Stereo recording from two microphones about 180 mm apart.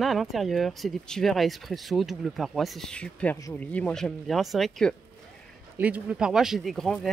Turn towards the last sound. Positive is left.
turn(degrees=0)  # may be behind; listen again after turning